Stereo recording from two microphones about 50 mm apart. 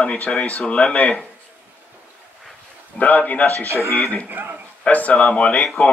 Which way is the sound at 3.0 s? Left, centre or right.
Left.